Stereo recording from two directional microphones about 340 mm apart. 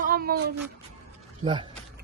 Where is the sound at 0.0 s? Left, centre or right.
Right.